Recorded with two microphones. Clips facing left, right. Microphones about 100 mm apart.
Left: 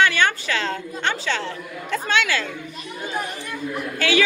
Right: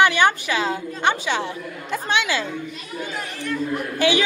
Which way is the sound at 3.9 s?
20° right (ahead or behind).